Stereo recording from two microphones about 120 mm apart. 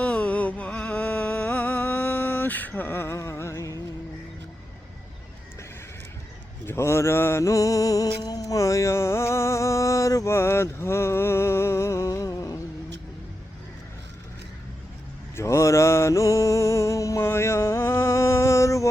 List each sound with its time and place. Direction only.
0.0 s music: 10° left (ahead or behind)
6.7 s a sound: 20° left (ahead or behind)
15.4 s music: 25° left (ahead or behind)